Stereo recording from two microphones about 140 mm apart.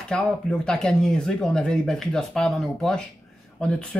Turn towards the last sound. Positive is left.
turn(degrees=5)  # may be behind; listen again after turning